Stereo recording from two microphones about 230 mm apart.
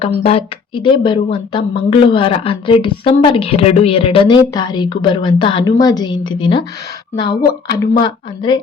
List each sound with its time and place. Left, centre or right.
0.0 s speech: left
7.7 s speech: centre